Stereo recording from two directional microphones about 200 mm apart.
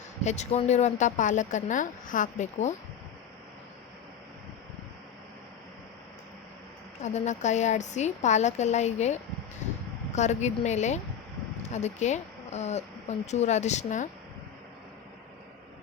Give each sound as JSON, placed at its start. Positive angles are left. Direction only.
{"t": 0.3, "sound": "speech", "side_deg": 35}
{"t": 7.0, "sound": "speech", "side_deg": 35}